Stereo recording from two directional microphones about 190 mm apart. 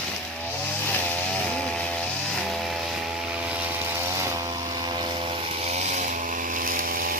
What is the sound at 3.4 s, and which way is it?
Chainsaw, 10° right (ahead or behind).